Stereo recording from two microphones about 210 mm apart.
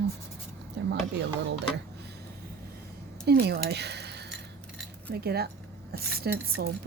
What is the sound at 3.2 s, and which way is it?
Speech, 50° right (ahead or behind).